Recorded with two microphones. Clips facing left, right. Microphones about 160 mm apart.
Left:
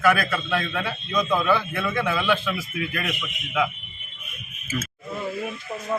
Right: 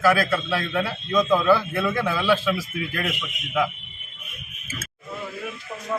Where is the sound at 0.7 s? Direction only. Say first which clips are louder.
Right 3 dB; 30° right (ahead or behind).